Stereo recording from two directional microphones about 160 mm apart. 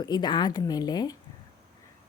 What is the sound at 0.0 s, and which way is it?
A woman's voice, 25° left (ahead or behind).